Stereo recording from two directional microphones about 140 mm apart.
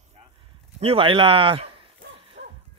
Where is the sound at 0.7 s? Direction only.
40° right (ahead or behind).